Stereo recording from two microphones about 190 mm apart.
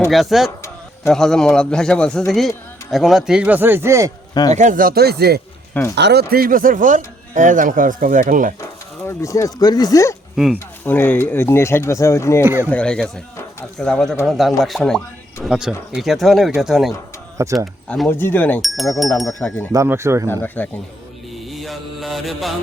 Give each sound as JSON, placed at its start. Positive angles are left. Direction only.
{"t": 0.1, "sound": "speech", "side_deg": 0}
{"t": 4.5, "sound": "speech", "side_deg": -40}
{"t": 9.0, "sound": "speech", "side_deg": 15}
{"t": 10.3, "sound": "speech", "side_deg": 0}
{"t": 10.8, "sound": "speech", "side_deg": 10}
{"t": 17.3, "sound": "speech", "side_deg": -15}
{"t": 17.8, "sound": "speech", "side_deg": 5}
{"t": 19.7, "sound": "speech", "side_deg": -15}
{"t": 20.2, "sound": "speech", "side_deg": 10}
{"t": 21.3, "sound": "mantra", "side_deg": 0}